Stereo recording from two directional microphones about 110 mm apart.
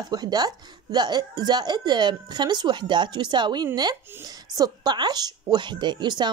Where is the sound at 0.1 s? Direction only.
40° right (ahead or behind).